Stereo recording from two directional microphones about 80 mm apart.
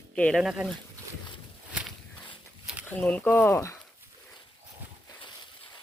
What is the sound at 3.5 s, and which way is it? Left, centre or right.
Speech, left.